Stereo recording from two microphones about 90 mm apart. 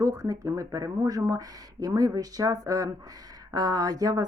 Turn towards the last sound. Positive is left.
turn(degrees=-40)  # may be behind; listen again after turning